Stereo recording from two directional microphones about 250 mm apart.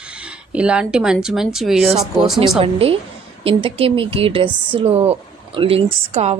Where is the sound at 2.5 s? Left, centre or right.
Right.